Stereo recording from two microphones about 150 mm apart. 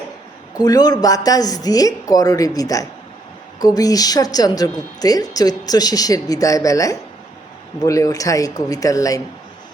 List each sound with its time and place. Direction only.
0.6 s a woman's voice: 25° left (ahead or behind)